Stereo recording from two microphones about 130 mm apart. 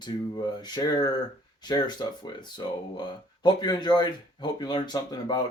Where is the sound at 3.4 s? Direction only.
35° left (ahead or behind).